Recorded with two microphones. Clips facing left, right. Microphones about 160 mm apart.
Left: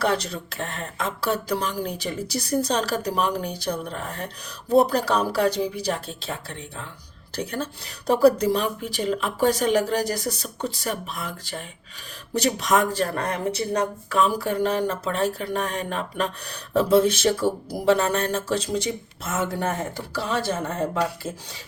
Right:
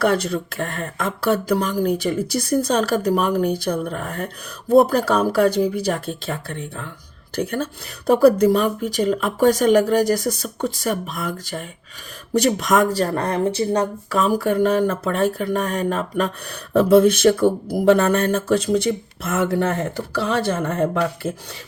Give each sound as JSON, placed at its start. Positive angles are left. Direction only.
{"t": 0.0, "sound": "speech", "side_deg": -55}